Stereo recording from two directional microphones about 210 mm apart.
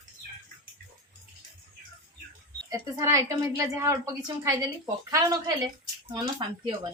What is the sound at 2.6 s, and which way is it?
Speech, 15° right (ahead or behind).